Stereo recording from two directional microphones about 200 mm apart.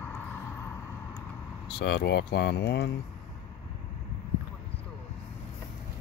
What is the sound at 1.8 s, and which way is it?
Speech, 55° left (ahead or behind).